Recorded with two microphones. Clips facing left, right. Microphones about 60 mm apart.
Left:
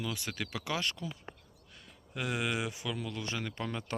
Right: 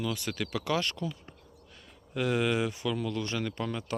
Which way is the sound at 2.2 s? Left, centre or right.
Centre.